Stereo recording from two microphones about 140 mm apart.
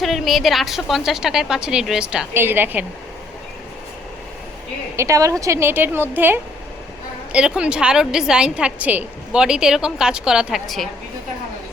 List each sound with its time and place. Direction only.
0.0 s a woman's voice: centre (ahead or behind)
2.3 s a woman's voice: 15° right (ahead or behind)
4.9 s a woman's voice: 20° right (ahead or behind); by 10.8 s centre (ahead or behind)